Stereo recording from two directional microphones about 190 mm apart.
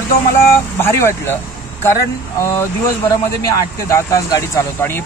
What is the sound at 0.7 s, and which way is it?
Speech, 10° left (ahead or behind).